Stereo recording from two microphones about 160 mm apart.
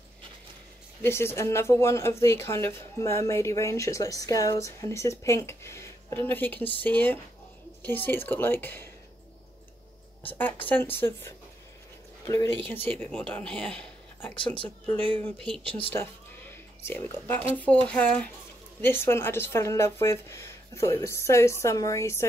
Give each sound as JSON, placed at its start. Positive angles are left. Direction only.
{"t": 1.0, "sound": "speech", "side_deg": 15}
{"t": 10.2, "sound": "speech", "side_deg": 10}
{"t": 15.9, "sound": "a sound", "side_deg": 15}
{"t": 17.6, "sound": "speech", "side_deg": 10}